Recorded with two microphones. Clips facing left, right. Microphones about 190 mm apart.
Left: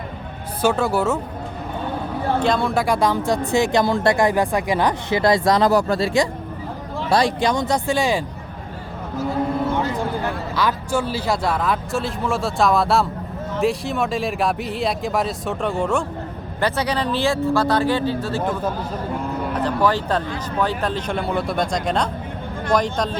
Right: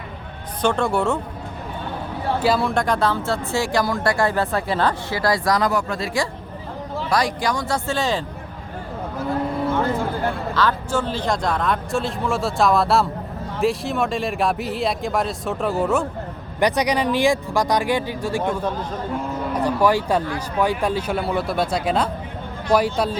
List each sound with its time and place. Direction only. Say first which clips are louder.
0.6 s speech: left 1 dB; 5° left (ahead or behind)
2.4 s speech: right 1 dB; 5° right (ahead or behind); by 6.1 s 35° left (ahead or behind)
7.1 s speech: left 4 dB; 25° left (ahead or behind); by 8.2 s 10° left (ahead or behind)
10.5 s speech: left 1 dB; 10° left (ahead or behind); by 16.0 s 5° right (ahead or behind)
16.6 s speech: right 2 dB; 15° right (ahead or behind)
19.5 s speech: right 2 dB; 10° right (ahead or behind)